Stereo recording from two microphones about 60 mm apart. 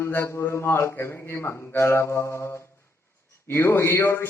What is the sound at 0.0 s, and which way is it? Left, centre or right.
A man's voice, left.